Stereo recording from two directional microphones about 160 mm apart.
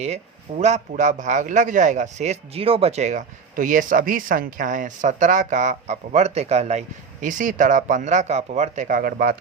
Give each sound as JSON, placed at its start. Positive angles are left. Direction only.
{"t": 0.6, "sound": "speech", "side_deg": -45}